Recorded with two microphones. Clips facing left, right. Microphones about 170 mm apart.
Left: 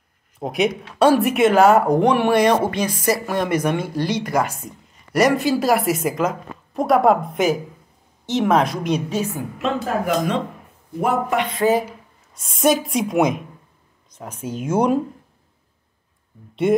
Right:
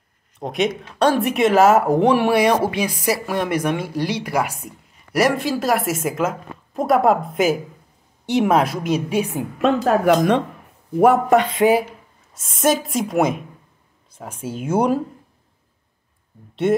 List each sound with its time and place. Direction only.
0.4 s a woman's voice: 5° left (ahead or behind)
9.6 s speech: 60° right (ahead or behind)
11.6 s a woman's voice: 15° right (ahead or behind)
12.5 s a woman's voice: centre (ahead or behind)